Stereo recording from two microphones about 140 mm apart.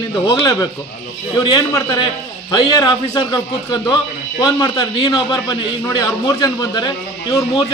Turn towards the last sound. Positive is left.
turn(degrees=30)  # may be behind; listen again after turning